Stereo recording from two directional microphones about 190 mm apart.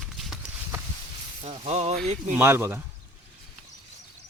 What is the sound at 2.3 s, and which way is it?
Speech, 10° right (ahead or behind).